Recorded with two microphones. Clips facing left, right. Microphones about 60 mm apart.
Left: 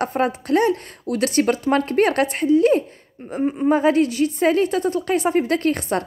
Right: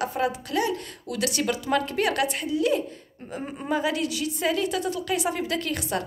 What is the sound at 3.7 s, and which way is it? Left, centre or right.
A woman's voice, left.